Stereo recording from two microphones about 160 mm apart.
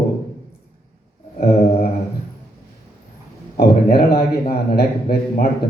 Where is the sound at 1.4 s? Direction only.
40° left (ahead or behind).